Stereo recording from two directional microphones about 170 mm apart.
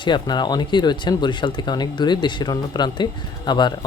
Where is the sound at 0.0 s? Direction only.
25° left (ahead or behind).